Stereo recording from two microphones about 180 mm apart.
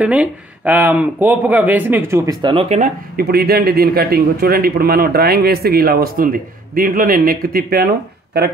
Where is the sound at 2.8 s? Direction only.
50° right (ahead or behind).